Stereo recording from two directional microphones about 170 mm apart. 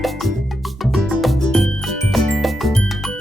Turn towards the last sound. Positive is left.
turn(degrees=0)  # may be behind; listen again after turning